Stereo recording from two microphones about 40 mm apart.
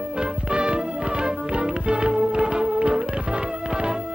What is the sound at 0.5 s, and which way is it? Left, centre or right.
Music, right.